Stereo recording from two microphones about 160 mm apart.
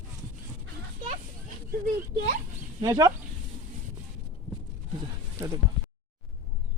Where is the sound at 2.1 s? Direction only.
55° right (ahead or behind).